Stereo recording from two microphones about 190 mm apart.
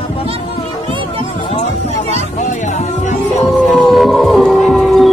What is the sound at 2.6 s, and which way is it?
Music, 40° left (ahead or behind).